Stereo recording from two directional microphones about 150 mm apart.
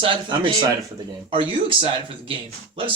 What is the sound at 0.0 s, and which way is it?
Speech, 35° right (ahead or behind).